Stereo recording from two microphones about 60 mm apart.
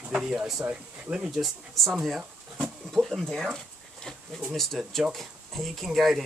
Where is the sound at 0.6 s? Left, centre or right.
Centre.